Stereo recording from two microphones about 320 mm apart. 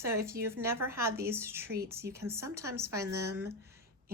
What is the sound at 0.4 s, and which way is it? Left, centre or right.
Speech, centre.